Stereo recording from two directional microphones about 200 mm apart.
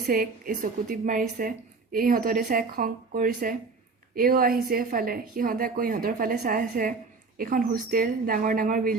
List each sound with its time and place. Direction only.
0.1 s a woman's voice: 45° right (ahead or behind)